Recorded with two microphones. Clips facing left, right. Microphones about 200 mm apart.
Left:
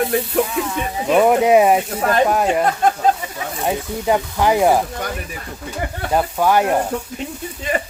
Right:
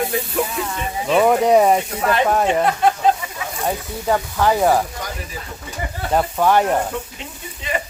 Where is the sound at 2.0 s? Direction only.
40° left (ahead or behind).